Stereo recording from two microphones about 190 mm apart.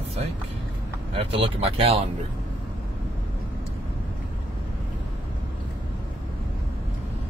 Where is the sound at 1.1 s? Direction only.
30° right (ahead or behind).